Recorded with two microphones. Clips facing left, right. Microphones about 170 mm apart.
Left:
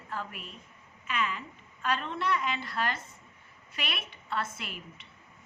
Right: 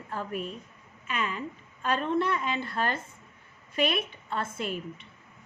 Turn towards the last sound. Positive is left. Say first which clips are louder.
# right 4 dB
turn(degrees=-50)  # may be behind; listen again after turning